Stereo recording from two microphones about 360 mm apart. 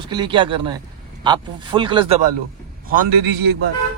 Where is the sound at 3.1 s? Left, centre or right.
Right.